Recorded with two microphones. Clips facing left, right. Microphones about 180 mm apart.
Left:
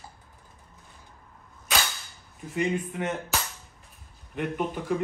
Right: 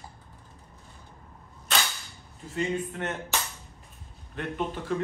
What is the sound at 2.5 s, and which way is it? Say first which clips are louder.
Speech: left 2 dB; 15° left (ahead or behind).